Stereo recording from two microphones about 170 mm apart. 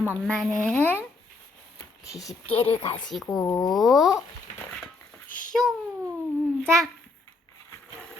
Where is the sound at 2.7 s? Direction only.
35° left (ahead or behind).